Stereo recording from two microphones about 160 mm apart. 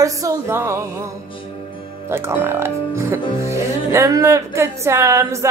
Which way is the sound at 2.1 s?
15° right (ahead or behind).